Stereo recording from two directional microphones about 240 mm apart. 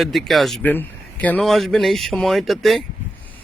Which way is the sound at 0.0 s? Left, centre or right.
Centre.